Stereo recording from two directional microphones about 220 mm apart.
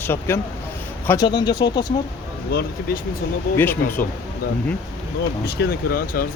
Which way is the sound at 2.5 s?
45° left (ahead or behind).